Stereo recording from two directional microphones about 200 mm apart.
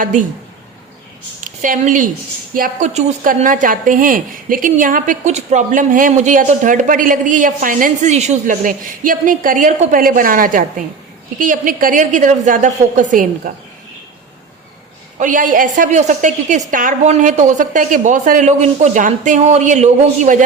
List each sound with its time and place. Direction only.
0.0 s a woman's voice: 40° right (ahead or behind)
1.6 s a woman's voice: 40° right (ahead or behind)
15.2 s a woman's voice: 40° right (ahead or behind)